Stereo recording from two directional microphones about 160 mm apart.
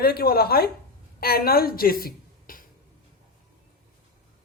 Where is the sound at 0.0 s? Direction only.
75° left (ahead or behind).